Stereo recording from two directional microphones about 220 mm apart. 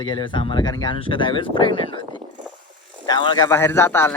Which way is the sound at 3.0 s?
20° left (ahead or behind).